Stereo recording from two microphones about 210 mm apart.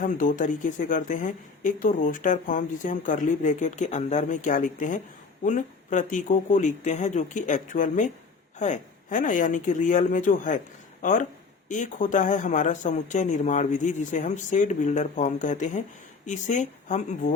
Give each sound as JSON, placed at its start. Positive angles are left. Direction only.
{"t": 0.0, "sound": "speech", "side_deg": 40}
{"t": 11.7, "sound": "speech", "side_deg": 35}